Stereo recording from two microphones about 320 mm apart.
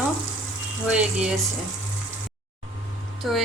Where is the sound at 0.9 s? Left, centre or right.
Centre.